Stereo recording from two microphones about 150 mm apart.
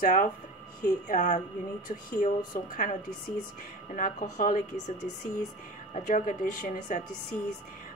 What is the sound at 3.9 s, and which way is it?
A woman's voice, 55° left (ahead or behind).